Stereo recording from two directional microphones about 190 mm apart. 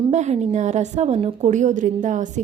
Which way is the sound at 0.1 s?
35° right (ahead or behind).